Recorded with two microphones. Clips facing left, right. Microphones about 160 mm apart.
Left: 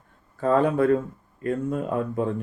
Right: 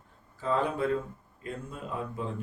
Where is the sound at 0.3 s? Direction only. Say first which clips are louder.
Left 8 dB; 55° left (ahead or behind).